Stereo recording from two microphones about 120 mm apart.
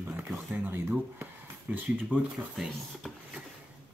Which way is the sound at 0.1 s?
5° right (ahead or behind).